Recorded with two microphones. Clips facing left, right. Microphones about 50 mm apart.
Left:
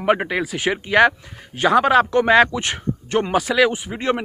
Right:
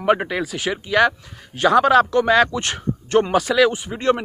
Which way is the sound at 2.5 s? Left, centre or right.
Centre.